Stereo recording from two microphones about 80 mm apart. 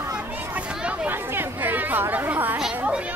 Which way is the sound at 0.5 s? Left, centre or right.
Centre.